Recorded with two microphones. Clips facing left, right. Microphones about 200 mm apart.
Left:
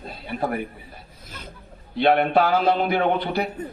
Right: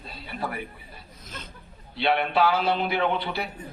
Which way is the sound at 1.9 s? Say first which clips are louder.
Left 6 dB; 50° left (ahead or behind).